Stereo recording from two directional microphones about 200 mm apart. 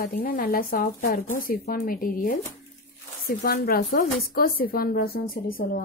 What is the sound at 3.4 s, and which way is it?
A woman's voice, 50° left (ahead or behind).